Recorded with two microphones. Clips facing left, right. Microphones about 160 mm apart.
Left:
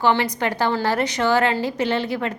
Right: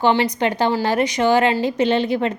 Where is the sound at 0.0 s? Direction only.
20° right (ahead or behind).